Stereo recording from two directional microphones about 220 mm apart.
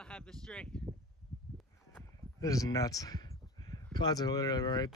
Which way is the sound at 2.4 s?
15° left (ahead or behind).